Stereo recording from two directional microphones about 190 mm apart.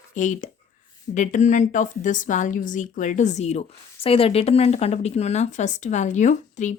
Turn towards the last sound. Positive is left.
turn(degrees=40)  # may be behind; listen again after turning